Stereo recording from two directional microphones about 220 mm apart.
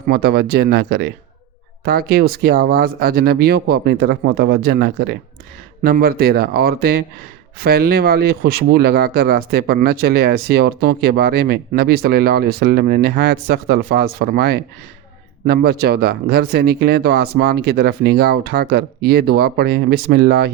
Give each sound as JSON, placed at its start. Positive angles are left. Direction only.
{"t": 0.1, "sound": "speech", "side_deg": -45}